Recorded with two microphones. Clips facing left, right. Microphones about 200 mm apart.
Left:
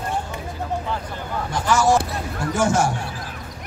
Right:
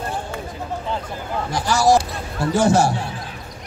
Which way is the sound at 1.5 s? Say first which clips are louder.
Right 2 dB; 35° right (ahead or behind).